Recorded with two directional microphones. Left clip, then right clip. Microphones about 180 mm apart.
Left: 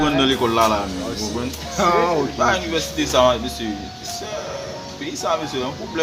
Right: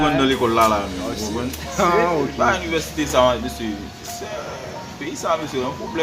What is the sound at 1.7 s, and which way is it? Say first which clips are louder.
Speech: even; 5° right (ahead or behind).